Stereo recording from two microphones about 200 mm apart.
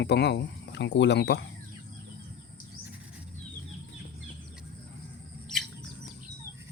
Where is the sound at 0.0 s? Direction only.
55° left (ahead or behind).